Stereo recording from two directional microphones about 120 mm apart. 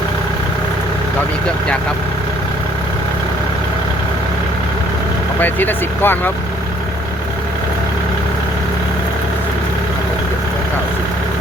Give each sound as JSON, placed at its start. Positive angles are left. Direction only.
{"t": 5.4, "sound": "speech", "side_deg": 15}